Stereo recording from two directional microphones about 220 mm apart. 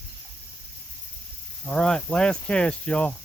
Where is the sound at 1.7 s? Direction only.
5° left (ahead or behind).